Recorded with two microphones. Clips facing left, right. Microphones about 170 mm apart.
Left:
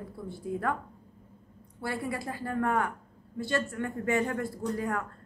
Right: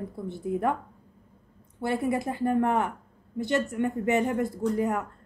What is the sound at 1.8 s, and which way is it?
Speech, 20° right (ahead or behind).